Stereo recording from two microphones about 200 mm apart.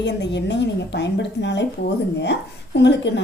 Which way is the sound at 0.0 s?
60° left (ahead or behind).